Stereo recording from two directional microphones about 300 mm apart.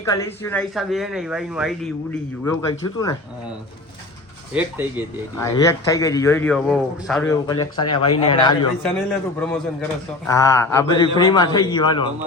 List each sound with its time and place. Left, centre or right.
0.0 s speech: centre
2.4 s a man's voice: centre
5.4 s a man's voice: centre
8.8 s a man's voice: centre